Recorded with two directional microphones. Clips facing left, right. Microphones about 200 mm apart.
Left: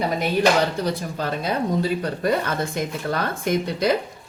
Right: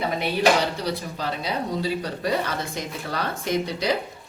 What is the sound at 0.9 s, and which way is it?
Speech, 50° left (ahead or behind).